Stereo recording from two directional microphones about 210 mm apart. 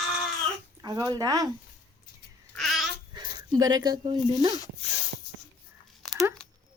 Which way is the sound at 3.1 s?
20° right (ahead or behind).